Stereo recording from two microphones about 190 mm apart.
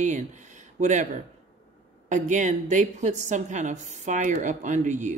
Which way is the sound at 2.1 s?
40° right (ahead or behind).